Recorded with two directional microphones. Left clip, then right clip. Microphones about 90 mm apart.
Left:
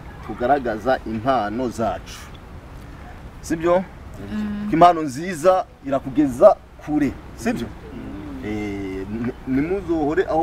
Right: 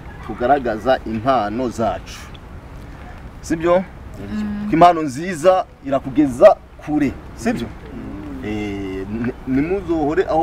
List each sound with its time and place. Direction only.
0.3 s a man's voice: centre (ahead or behind)
3.4 s a man's voice: centre (ahead or behind)
4.3 s a man's voice: 25° left (ahead or behind)
4.6 s a man's voice: centre (ahead or behind)